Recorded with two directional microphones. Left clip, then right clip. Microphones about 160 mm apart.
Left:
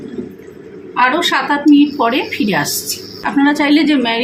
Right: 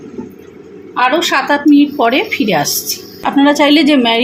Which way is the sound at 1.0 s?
35° right (ahead or behind).